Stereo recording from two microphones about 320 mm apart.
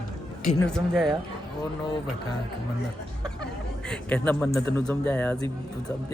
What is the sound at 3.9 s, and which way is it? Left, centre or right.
Speech, centre.